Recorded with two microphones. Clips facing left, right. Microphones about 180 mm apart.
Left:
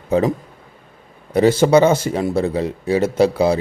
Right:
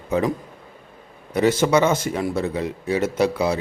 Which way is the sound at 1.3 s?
30° left (ahead or behind).